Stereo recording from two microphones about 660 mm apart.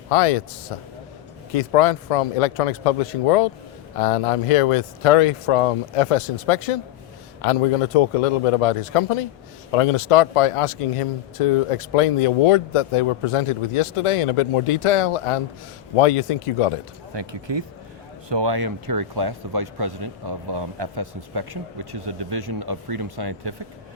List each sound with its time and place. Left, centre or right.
0.1 s speech: left
17.2 s a man's voice: right